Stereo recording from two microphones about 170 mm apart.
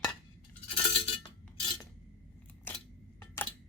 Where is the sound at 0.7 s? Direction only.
30° left (ahead or behind).